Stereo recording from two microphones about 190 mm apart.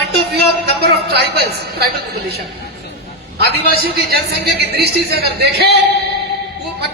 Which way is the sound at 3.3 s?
55° right (ahead or behind).